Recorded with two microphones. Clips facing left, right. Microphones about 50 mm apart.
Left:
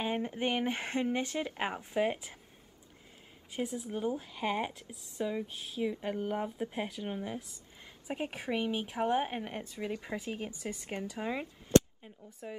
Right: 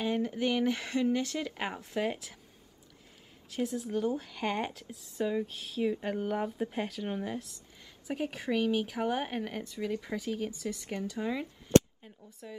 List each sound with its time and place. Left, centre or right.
0.0 s a sound: left
0.3 s speech: left
3.4 s speech: centre
7.8 s a woman's voice: left